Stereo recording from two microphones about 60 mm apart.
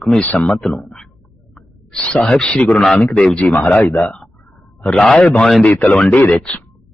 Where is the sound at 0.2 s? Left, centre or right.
Left.